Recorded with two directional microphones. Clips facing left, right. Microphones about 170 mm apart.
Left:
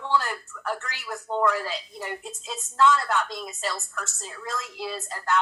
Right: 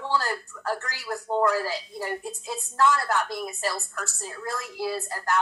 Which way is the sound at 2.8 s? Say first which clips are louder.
Left 1 dB; 15° right (ahead or behind).